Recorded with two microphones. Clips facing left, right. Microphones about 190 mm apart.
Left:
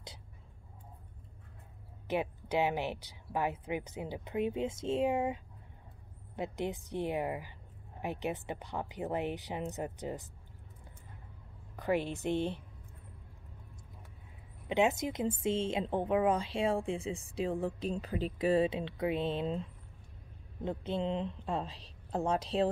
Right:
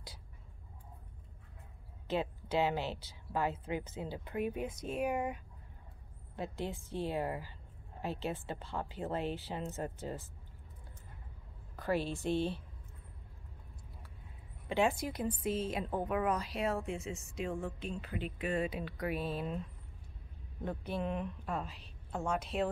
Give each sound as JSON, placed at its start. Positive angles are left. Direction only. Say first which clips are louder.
{"t": 2.0, "sound": "a woman's voice", "louder": "left 2 dB", "side_deg": 15}
{"t": 11.7, "sound": "speech", "louder": "left 2 dB", "side_deg": 15}
{"t": 14.7, "sound": "a woman's voice", "louder": "left 2 dB", "side_deg": 20}
{"t": 20.6, "sound": "a woman's voice", "louder": "left 3 dB", "side_deg": 20}